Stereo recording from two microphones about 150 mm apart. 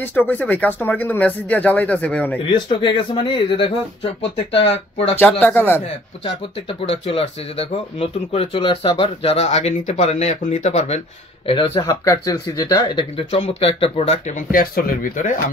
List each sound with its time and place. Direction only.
0.0 s speech: 15° left (ahead or behind)
2.5 s speech: 35° left (ahead or behind)
5.4 s speech: 15° left (ahead or behind)
6.9 s speech: 40° left (ahead or behind)
11.4 s speech: 35° left (ahead or behind)
11.8 s speech: 20° left (ahead or behind)
13.3 s speech: 40° left (ahead or behind)
14.5 s speech: 70° left (ahead or behind)